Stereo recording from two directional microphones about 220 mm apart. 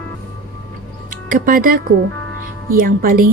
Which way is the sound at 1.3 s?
40° right (ahead or behind).